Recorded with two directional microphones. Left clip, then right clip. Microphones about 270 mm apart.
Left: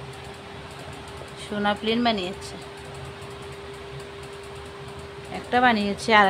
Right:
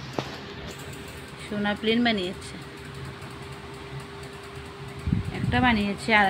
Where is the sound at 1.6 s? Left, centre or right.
Centre.